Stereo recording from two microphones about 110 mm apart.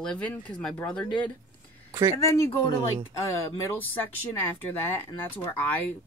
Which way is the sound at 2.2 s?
25° left (ahead or behind).